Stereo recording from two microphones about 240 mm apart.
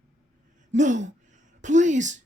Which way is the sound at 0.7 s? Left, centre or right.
Right.